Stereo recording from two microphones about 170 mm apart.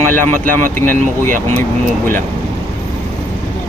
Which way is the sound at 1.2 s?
15° left (ahead or behind).